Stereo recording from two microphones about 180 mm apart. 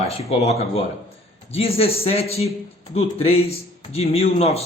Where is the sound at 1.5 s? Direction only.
35° left (ahead or behind).